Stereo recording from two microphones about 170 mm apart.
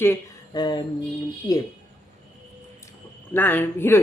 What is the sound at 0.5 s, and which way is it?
Mantra, 25° left (ahead or behind).